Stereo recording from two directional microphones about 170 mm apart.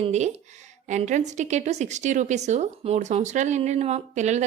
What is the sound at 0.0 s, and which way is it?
A woman's voice, 40° right (ahead or behind).